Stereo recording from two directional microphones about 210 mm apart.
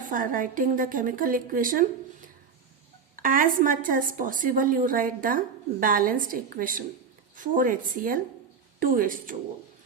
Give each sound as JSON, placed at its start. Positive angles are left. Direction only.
{"t": 0.0, "sound": "a woman's voice", "side_deg": -40}